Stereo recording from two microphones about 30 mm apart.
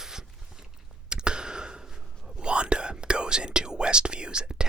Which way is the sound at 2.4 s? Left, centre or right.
Right.